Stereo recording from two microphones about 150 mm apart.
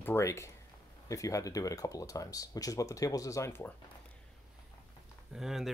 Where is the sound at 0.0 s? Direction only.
15° left (ahead or behind).